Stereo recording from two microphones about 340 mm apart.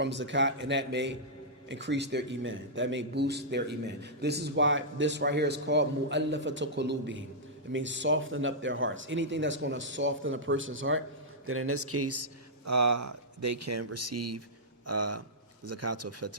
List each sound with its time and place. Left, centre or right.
0.0 s a man's voice: right
12.6 s speech: right